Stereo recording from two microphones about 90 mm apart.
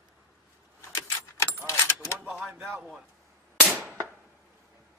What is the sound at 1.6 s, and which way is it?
Keys jangling, 35° left (ahead or behind).